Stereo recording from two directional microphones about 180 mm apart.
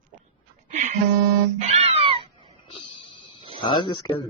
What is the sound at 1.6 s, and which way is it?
Cat, 35° right (ahead or behind).